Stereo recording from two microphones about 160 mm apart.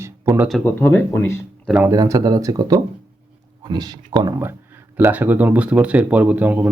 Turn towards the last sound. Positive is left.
turn(degrees=-10)  # may be behind; listen again after turning